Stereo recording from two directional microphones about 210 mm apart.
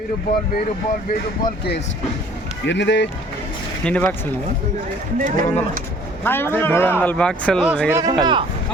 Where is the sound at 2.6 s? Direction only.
60° left (ahead or behind).